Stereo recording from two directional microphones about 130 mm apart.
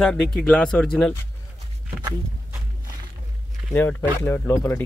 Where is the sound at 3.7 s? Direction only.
15° left (ahead or behind).